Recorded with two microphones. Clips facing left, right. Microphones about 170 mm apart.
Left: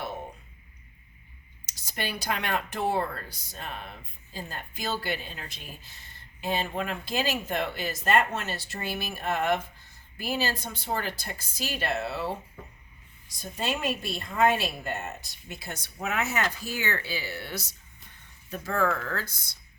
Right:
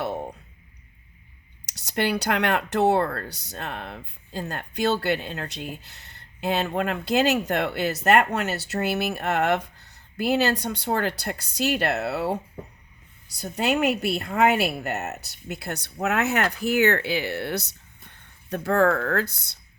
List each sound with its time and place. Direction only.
1.6 s speech: 70° right (ahead or behind)
13.4 s speech: 70° right (ahead or behind)